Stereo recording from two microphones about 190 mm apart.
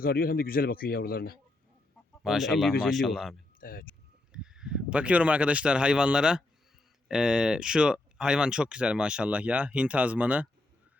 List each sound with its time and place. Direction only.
0.0 s a man's voice: 50° left (ahead or behind)
2.2 s speech: centre (ahead or behind)
3.6 s speech: 50° left (ahead or behind)
4.3 s speech: 5° right (ahead or behind)